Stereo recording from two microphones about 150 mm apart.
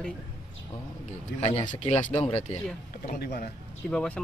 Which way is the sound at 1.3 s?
90° left.